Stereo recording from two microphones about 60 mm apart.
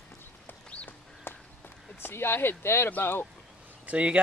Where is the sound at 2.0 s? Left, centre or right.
Left.